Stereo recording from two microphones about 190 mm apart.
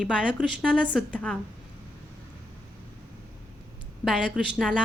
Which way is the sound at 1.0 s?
5° left (ahead or behind).